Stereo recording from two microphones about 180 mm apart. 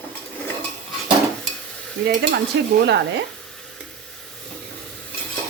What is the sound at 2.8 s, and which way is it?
Speech, 75° right (ahead or behind).